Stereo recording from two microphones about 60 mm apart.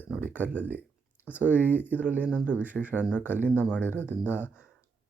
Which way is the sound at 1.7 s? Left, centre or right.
Left.